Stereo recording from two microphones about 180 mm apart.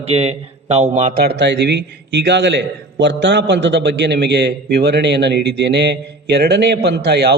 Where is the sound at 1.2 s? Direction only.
70° right (ahead or behind).